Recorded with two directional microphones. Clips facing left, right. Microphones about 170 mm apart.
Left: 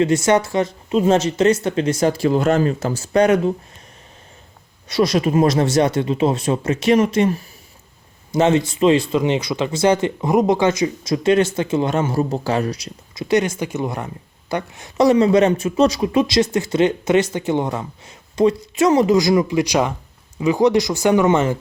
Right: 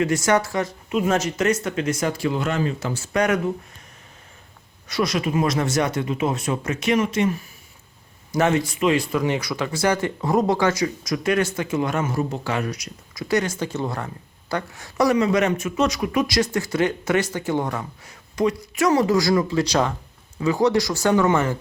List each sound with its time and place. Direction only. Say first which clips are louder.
0.0 s speech: left 4 dB; 25° left (ahead or behind)
4.9 s speech: left 6 dB; 30° left (ahead or behind)
8.3 s speech: left 4 dB; 25° left (ahead or behind)